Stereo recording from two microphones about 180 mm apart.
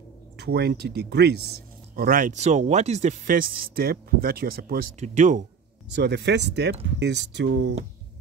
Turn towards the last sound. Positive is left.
turn(degrees=-75)  # may be behind; listen again after turning